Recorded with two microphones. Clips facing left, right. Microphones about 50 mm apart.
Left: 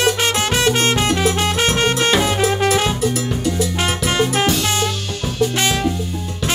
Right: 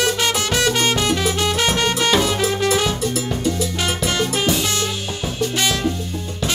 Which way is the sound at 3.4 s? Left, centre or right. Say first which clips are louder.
Left 1 dB; centre.